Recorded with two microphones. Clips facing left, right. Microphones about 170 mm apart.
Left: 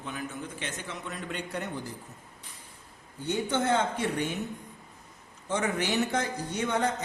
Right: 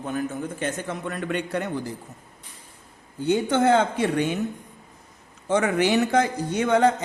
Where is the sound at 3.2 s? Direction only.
90° right.